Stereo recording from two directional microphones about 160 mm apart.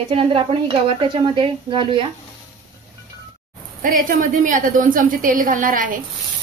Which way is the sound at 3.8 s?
55° right (ahead or behind).